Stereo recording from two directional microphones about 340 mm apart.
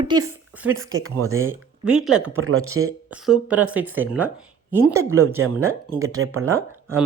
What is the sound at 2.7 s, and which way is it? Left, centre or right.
Speech, right.